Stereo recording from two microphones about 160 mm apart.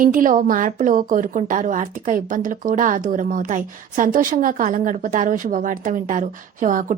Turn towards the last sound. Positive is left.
turn(degrees=-55)  # may be behind; listen again after turning